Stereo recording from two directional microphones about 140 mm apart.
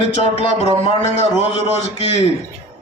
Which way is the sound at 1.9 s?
50° left (ahead or behind).